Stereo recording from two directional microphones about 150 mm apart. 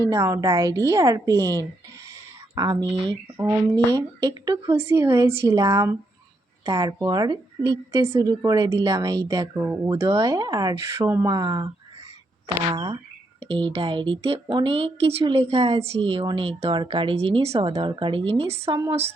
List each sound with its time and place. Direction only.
0.1 s a woman's voice: 20° right (ahead or behind)
12.7 s a woman's voice: 25° right (ahead or behind)